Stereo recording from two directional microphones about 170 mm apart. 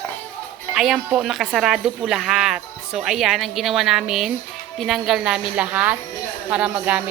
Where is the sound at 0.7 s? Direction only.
5° right (ahead or behind).